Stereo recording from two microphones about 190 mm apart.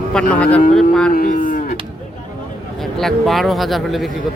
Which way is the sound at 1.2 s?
40° left (ahead or behind).